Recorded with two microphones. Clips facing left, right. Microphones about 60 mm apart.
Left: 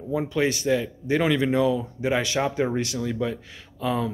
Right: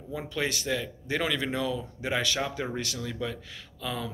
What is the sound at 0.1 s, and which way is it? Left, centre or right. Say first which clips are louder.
Speech: left 8 dB; centre.